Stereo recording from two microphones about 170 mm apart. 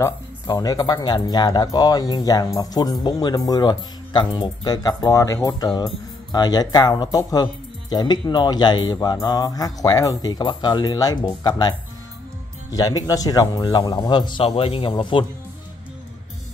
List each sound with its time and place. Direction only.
0.0 s speech: 20° left (ahead or behind)
12.7 s speech: 20° left (ahead or behind)